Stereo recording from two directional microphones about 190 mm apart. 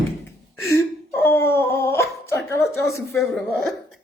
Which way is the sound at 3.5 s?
Centre (ahead or behind).